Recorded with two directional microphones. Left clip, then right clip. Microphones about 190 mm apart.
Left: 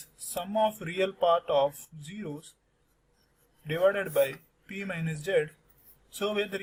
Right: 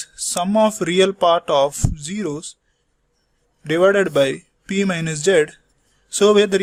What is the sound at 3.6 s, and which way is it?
Speech, 55° right (ahead or behind).